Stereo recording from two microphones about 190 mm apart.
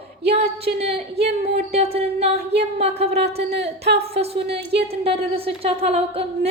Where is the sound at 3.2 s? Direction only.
60° right (ahead or behind).